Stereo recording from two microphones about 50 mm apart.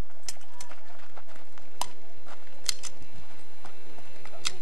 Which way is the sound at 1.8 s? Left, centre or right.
Centre.